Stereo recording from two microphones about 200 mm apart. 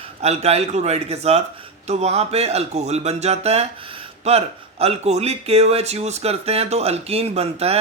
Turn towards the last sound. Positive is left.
turn(degrees=-30)  # may be behind; listen again after turning